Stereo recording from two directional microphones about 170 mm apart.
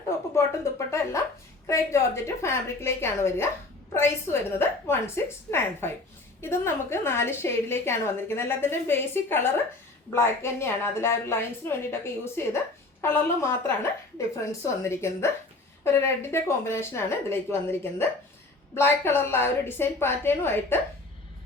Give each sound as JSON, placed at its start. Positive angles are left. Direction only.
{"t": 0.3, "sound": "a woman's voice", "side_deg": 15}